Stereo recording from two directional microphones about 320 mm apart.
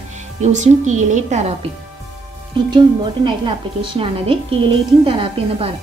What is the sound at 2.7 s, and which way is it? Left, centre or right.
A woman's voice, centre.